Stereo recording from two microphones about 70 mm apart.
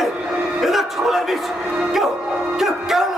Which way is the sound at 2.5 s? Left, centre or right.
Centre.